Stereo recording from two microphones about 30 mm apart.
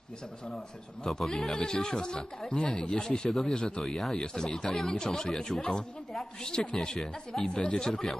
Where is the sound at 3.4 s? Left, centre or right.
Left.